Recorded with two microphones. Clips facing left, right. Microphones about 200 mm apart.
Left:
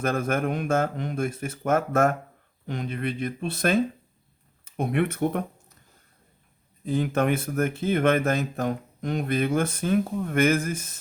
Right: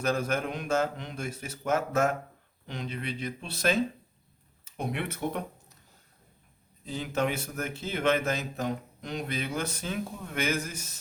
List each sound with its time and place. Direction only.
0.0 s speech: 55° left (ahead or behind)
6.8 s speech: 55° left (ahead or behind)